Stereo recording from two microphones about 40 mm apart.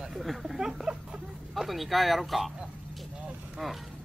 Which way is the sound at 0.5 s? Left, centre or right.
Centre.